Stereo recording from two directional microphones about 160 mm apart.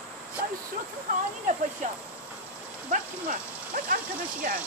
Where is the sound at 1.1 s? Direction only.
65° right (ahead or behind).